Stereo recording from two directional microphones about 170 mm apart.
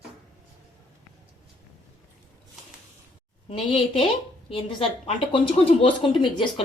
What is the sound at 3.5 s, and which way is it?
A woman's voice, 35° left (ahead or behind).